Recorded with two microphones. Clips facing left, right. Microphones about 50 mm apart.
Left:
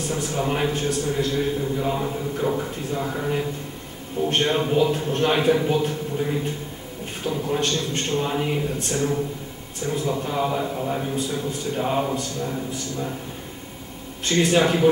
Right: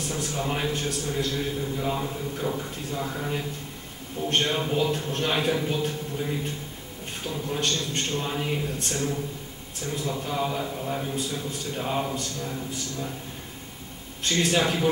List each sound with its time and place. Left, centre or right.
0.0 s a man's voice: centre
14.2 s a man's voice: centre